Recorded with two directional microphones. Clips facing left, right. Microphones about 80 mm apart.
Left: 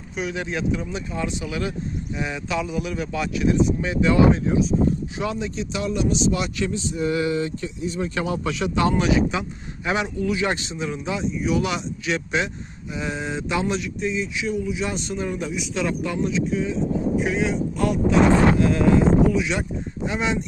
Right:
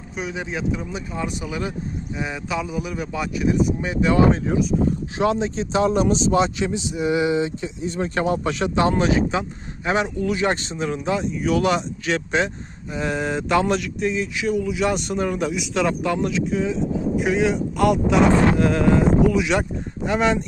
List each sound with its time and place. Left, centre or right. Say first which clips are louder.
0.3 s speech: even; right
5.3 s speech: right 6 dB; right
7.9 s speech: right 4 dB; right
20.1 s speech: right 5 dB; right